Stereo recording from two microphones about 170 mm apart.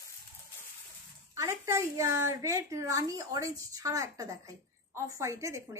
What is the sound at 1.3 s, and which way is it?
A woman's voice, 20° right (ahead or behind).